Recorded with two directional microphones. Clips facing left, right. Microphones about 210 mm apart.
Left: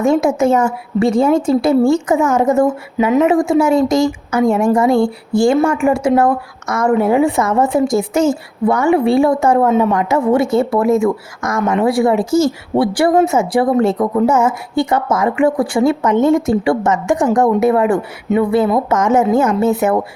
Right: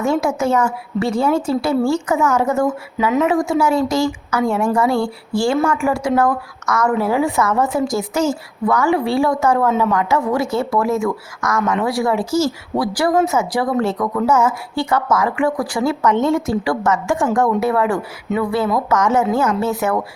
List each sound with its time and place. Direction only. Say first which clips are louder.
0.0 s a woman's voice: left 5 dB; 20° left (ahead or behind)